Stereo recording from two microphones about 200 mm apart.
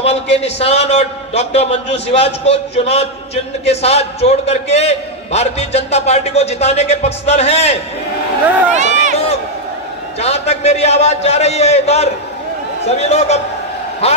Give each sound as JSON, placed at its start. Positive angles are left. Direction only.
{"t": 0.0, "sound": "a man's voice", "side_deg": 30}
{"t": 8.7, "sound": "run", "side_deg": -40}
{"t": 10.1, "sound": "a man's voice", "side_deg": 30}